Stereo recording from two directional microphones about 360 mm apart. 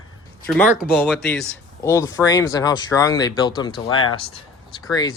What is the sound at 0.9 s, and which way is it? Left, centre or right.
Speech, centre.